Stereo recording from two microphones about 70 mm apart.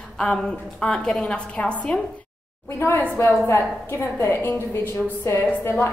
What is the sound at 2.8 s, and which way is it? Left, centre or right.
A woman's voice, left.